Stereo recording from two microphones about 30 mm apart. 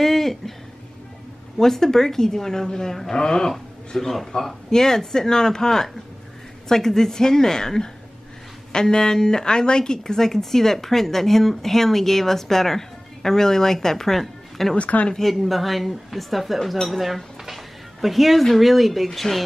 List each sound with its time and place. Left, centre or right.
0.0 s a sound: centre
1.6 s speech: centre
14.2 s a sound: centre
14.8 s speech: left
15.1 s speech: centre
16.8 s dishes: centre
18.0 s speech: centre